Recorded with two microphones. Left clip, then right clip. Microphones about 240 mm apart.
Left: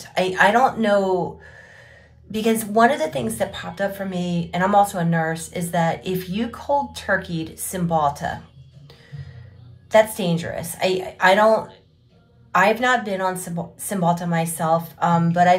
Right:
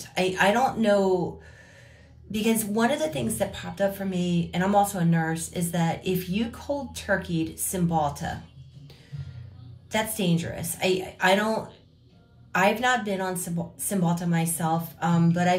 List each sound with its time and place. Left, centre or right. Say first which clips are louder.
0.0 s a sound: left 4 dB; centre
0.4 s speech: left 7 dB; centre
2.3 s speech: left 7 dB; centre
9.8 s speech: left 11 dB; centre